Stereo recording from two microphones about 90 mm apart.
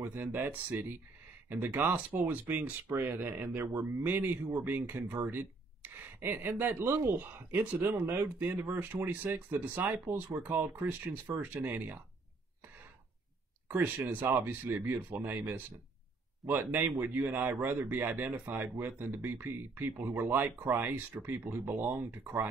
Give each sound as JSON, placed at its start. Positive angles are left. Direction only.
{"t": 0.0, "sound": "speech", "side_deg": -25}
{"t": 13.7, "sound": "speech", "side_deg": -20}